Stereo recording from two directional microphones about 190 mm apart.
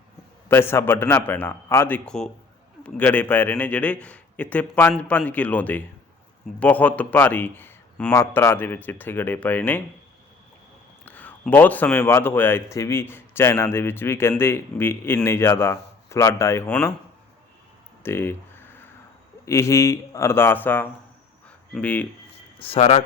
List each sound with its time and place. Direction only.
0.4 s speech: 10° left (ahead or behind)
11.0 s speech: 10° left (ahead or behind)
18.0 s a sound: 10° left (ahead or behind)
19.5 s speech: 15° left (ahead or behind)
22.5 s speech: 30° left (ahead or behind)